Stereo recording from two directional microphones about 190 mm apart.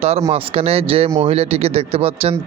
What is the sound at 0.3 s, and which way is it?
Speech, 30° right (ahead or behind).